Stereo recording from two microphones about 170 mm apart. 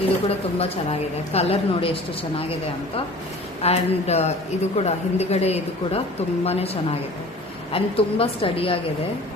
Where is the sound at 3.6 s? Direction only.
40° left (ahead or behind).